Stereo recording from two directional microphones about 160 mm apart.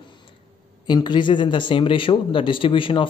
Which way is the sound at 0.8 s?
30° left (ahead or behind).